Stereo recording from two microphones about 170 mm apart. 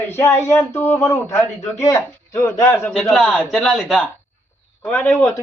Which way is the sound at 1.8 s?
20° left (ahead or behind).